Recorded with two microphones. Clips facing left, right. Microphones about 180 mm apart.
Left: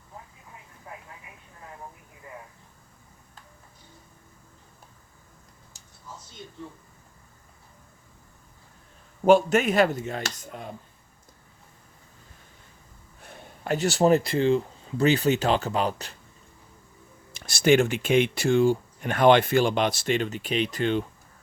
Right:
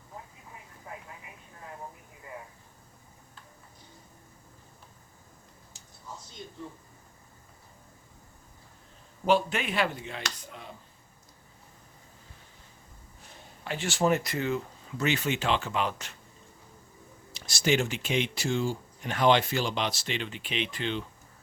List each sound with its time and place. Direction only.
9.2 s speech: 45° left (ahead or behind)
13.2 s a sound: 60° left (ahead or behind)
13.7 s speech: 35° left (ahead or behind)
17.3 s speech: 55° left (ahead or behind)